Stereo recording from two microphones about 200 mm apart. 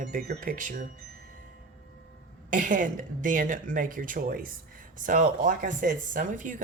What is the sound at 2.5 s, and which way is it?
A woman's voice, 40° right (ahead or behind).